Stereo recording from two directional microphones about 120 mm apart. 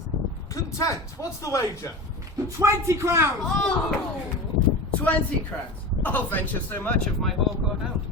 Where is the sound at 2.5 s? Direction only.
25° right (ahead or behind).